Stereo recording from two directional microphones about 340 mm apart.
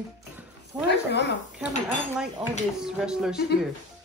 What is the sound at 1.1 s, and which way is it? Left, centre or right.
Speech, left.